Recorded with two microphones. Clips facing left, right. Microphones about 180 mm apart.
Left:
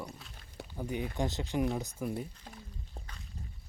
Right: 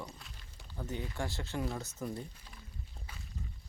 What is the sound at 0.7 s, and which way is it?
Speech, 15° left (ahead or behind).